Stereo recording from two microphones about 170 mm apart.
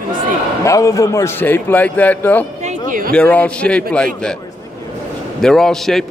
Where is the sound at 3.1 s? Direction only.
10° left (ahead or behind).